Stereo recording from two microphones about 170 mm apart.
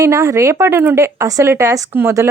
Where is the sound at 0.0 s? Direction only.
15° right (ahead or behind).